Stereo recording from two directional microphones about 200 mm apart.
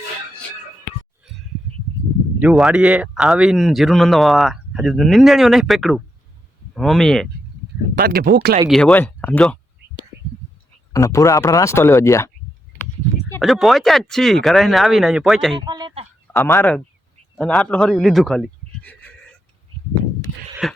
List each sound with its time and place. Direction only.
2.4 s speech: 5° right (ahead or behind)
7.9 s speech: 50° right (ahead or behind)
8.7 s speech: 5° left (ahead or behind)
10.9 s speech: 15° left (ahead or behind)
13.4 s speech: centre (ahead or behind)
15.5 s a sound: 20° right (ahead or behind)
16.2 s a sound: 5° left (ahead or behind)
16.5 s a man's voice: 10° left (ahead or behind)
20.6 s speech: centre (ahead or behind)